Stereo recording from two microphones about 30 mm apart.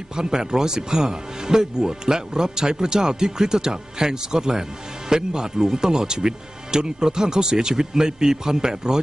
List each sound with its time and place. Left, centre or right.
0.1 s speech: right